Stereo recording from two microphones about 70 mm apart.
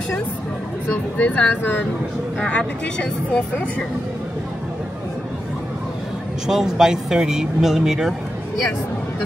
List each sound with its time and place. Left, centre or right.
0.8 s speech: left
2.4 s speech: centre
6.4 s speech: centre